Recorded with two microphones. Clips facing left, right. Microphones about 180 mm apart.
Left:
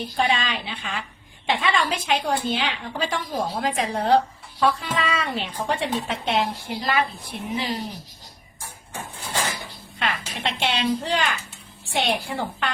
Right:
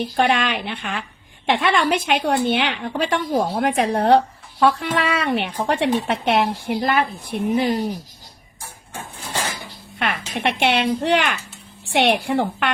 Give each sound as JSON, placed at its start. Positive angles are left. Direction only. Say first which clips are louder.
{"t": 0.2, "sound": "a woman's voice", "louder": "right 4 dB", "side_deg": -65}
{"t": 10.0, "sound": "a woman's voice", "louder": "right 5 dB", "side_deg": -60}